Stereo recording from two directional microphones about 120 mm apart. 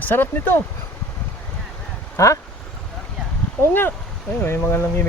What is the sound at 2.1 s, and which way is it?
Speech, 25° left (ahead or behind).